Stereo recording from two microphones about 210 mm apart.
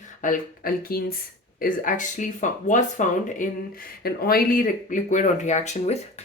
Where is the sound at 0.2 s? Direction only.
40° left (ahead or behind).